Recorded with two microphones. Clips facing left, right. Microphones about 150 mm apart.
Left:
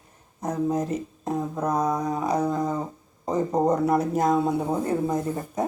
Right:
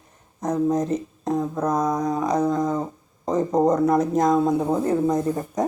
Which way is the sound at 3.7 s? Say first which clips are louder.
Right 3 dB; 10° left (ahead or behind).